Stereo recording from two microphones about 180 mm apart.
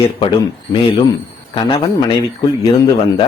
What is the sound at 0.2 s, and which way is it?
Speech, 30° left (ahead or behind).